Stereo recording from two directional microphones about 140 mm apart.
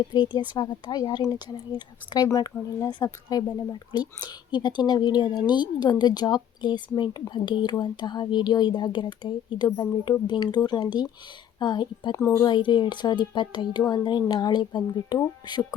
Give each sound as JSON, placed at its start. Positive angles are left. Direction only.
{"t": 0.1, "sound": "speech", "side_deg": 35}